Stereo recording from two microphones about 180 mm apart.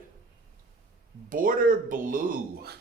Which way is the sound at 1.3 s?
50° right (ahead or behind).